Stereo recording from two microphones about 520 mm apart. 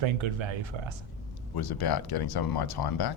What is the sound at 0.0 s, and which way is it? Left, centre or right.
Speech, right.